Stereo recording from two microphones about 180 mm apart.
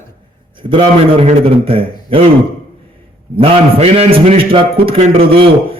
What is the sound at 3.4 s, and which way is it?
A man's voice, 30° right (ahead or behind).